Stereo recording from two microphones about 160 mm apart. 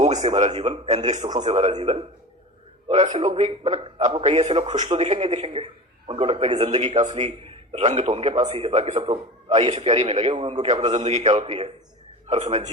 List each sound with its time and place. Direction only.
0.2 s a man's voice: 45° right (ahead or behind)